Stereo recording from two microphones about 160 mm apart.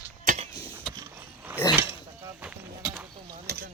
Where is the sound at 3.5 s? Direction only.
90° right.